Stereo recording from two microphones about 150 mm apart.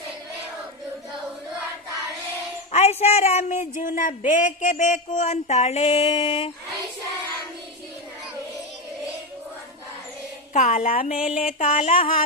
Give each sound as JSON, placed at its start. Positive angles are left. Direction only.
{"t": 2.7, "sound": "speech", "side_deg": 45}
{"t": 10.5, "sound": "speech", "side_deg": 50}